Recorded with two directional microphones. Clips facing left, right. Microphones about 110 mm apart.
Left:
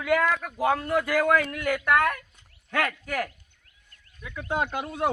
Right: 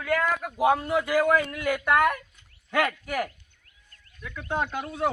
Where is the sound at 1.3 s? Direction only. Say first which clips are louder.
Even; 20° right (ahead or behind).